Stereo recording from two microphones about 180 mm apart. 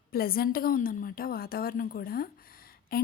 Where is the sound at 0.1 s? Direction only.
55° left (ahead or behind).